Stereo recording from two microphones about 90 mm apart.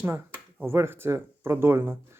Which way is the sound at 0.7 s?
25° right (ahead or behind).